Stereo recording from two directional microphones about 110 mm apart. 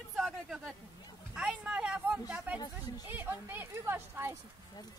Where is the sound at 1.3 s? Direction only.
10° right (ahead or behind).